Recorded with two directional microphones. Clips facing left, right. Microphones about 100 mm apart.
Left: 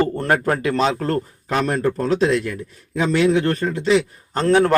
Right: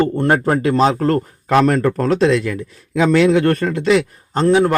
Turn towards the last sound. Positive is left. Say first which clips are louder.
# right 2 dB
turn(degrees=-10)  # may be behind; listen again after turning